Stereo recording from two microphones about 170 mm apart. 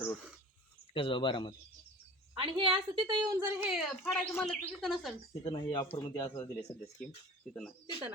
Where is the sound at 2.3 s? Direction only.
30° right (ahead or behind).